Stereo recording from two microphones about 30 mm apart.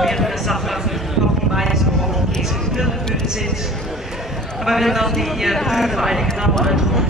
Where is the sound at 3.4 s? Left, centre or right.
Centre.